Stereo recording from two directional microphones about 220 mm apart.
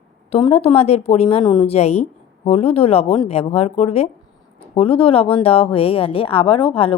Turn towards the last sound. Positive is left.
turn(degrees=25)  # may be behind; listen again after turning